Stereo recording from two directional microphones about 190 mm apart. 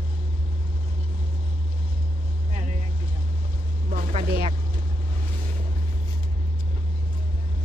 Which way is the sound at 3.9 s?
40° right (ahead or behind).